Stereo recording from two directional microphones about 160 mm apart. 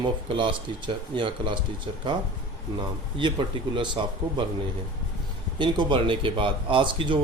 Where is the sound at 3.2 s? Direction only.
30° right (ahead or behind).